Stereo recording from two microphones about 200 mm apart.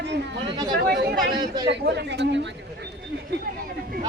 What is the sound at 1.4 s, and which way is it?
Speech, 20° right (ahead or behind).